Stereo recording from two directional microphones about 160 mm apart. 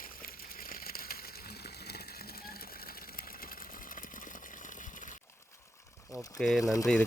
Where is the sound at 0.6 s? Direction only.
70° left (ahead or behind).